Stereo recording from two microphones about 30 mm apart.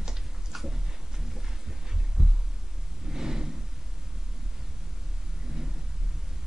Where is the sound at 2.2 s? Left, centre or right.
Right.